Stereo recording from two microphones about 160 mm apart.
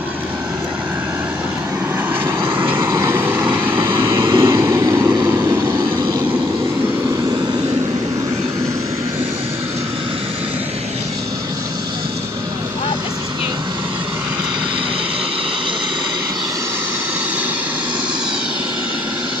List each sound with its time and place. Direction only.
2.5 s vehicle: 15° right (ahead or behind)